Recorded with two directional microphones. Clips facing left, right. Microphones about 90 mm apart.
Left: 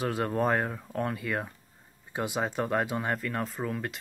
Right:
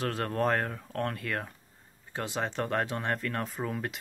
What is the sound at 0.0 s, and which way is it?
Speech, 10° left (ahead or behind).